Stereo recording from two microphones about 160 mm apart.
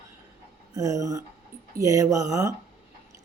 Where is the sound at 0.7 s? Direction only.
20° right (ahead or behind).